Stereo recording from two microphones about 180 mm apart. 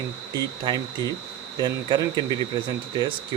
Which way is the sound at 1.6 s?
25° right (ahead or behind).